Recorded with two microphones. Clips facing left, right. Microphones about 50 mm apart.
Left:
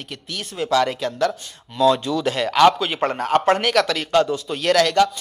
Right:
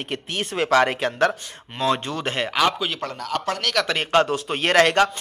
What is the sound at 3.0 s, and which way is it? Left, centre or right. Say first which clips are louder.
Speech: left 8 dB; left.